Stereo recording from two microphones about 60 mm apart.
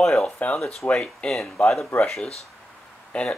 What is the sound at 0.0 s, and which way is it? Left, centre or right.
Speech, centre.